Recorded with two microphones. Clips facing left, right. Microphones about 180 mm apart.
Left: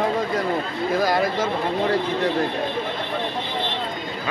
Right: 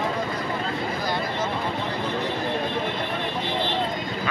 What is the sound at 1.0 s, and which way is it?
Speech, 90° left.